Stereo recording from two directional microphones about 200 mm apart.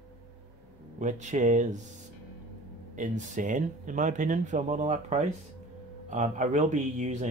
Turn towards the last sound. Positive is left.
turn(degrees=-35)  # may be behind; listen again after turning